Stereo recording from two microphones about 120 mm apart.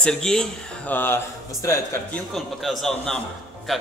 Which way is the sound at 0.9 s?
15° left (ahead or behind).